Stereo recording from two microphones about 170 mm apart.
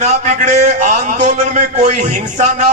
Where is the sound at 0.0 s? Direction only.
40° right (ahead or behind).